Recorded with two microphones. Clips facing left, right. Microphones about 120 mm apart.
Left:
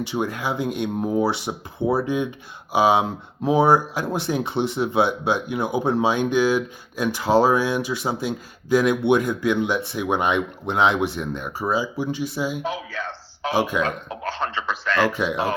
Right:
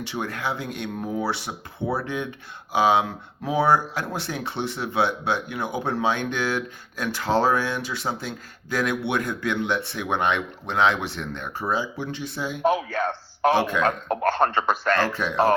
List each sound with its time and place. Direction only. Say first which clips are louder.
0.0 s speech: left 4 dB; 15° left (ahead or behind)
12.6 s a sound: right 7 dB; 50° right (ahead or behind)
13.5 s speech: left 1 dB; 10° left (ahead or behind)
13.8 s a man's voice: right 5 dB; 50° right (ahead or behind)
15.1 s speech: left 4 dB; 15° left (ahead or behind)